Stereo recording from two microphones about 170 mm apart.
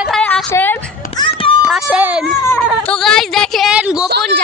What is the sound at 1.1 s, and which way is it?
Children playing, 30° left (ahead or behind).